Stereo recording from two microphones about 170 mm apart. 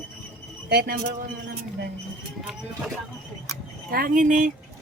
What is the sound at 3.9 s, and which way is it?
Speech, 55° right (ahead or behind).